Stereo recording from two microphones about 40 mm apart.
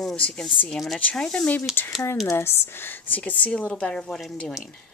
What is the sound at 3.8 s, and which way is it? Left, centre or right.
Speech, centre.